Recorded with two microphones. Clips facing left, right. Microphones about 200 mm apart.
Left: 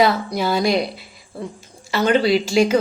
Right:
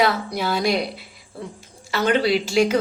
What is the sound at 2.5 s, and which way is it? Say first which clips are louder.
Speech: left 1 dB; centre (ahead or behind).